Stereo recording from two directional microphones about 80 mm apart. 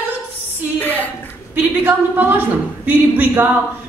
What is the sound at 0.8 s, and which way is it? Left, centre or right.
Speech, left.